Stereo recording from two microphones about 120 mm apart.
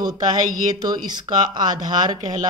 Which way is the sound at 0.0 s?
35° right (ahead or behind).